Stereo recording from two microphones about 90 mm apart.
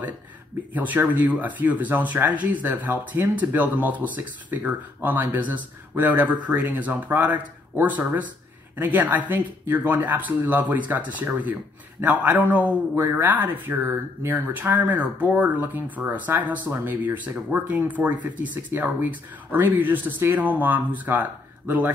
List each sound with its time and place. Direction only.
0.7 s a man's voice: 20° right (ahead or behind)